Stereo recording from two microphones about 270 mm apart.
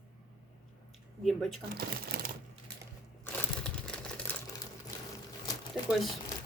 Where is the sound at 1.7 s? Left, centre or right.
Right.